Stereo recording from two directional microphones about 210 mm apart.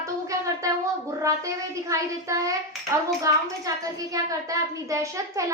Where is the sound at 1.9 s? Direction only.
15° right (ahead or behind).